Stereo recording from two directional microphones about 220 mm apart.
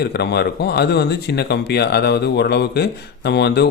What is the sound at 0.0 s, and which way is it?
Speech, 50° left (ahead or behind).